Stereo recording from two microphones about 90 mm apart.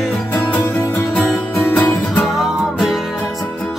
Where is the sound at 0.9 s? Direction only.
20° left (ahead or behind).